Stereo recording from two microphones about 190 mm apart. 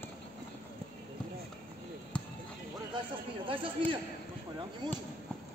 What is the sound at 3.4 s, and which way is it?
A man's voice, 25° right (ahead or behind).